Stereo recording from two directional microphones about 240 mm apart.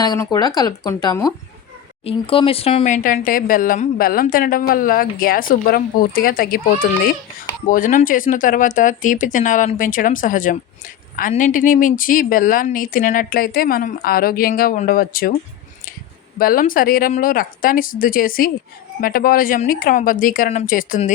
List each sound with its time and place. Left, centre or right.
0.0 s speech: centre; by 15.4 s left
16.4 s speech: left